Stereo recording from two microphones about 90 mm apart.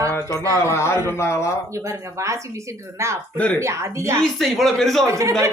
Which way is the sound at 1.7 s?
35° right (ahead or behind).